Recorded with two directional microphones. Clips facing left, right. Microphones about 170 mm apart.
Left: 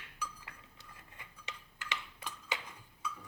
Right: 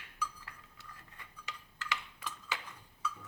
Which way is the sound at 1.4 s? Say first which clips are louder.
Right 3 dB; 25° left (ahead or behind).